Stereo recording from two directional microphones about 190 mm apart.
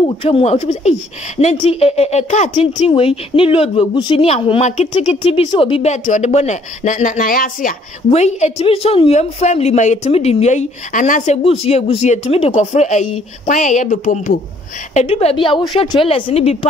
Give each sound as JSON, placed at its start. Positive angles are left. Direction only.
{"t": 0.2, "sound": "a woman's voice", "side_deg": 30}
{"t": 8.1, "sound": "a woman's voice", "side_deg": 35}
{"t": 11.4, "sound": "a woman's voice", "side_deg": 30}
{"t": 15.0, "sound": "a woman's voice", "side_deg": 35}